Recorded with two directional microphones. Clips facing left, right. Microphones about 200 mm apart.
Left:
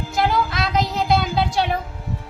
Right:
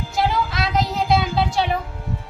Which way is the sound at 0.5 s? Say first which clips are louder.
Even; centre (ahead or behind).